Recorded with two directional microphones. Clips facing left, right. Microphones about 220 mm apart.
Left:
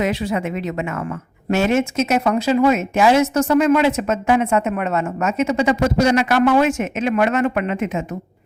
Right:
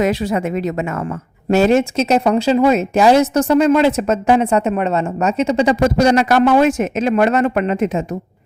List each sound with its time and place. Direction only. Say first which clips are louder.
0.0 s speech: right 4 dB; 40° right (ahead or behind)